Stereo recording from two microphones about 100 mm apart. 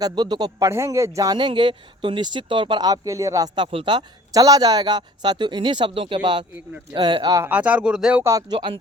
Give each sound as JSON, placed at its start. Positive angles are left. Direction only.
{"t": 0.0, "sound": "speech", "side_deg": -45}
{"t": 0.6, "sound": "a man's voice", "side_deg": -30}
{"t": 1.4, "sound": "speech", "side_deg": -50}
{"t": 3.7, "sound": "speech", "side_deg": -60}
{"t": 6.1, "sound": "speech", "side_deg": -55}
{"t": 7.4, "sound": "speech", "side_deg": -15}
{"t": 8.2, "sound": "a man's voice", "side_deg": -30}
{"t": 8.4, "sound": "speech", "side_deg": -50}